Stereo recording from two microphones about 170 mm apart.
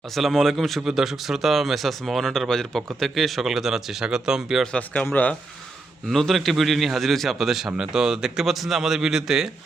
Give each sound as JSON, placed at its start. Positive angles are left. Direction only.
{"t": 0.1, "sound": "speech", "side_deg": 0}